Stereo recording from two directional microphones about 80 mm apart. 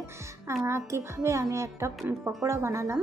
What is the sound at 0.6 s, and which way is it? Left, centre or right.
A woman's voice, right.